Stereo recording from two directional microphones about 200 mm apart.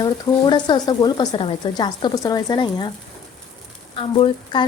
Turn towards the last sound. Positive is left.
turn(degrees=25)  # may be behind; listen again after turning